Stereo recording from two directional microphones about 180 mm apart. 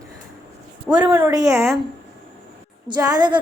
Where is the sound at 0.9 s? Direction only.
10° right (ahead or behind).